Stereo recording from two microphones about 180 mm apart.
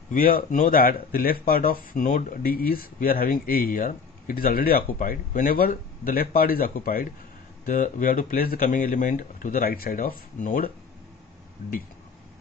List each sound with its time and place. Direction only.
0.1 s speech: 50° left (ahead or behind)